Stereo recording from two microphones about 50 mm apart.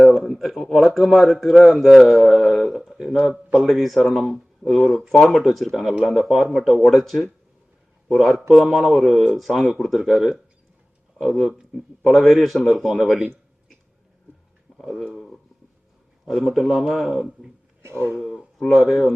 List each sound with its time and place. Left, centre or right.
0.0 s a sound: centre
0.9 s speech: centre
5.9 s speech: centre
6.1 s a man's voice: centre
14.8 s speech: centre
16.2 s speech: centre
17.8 s a sound: right
18.6 s speech: centre